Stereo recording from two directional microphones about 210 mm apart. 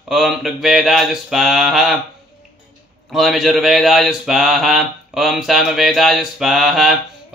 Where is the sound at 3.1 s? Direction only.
Centre (ahead or behind).